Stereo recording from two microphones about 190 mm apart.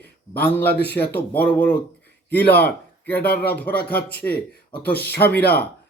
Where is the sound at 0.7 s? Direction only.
60° left (ahead or behind).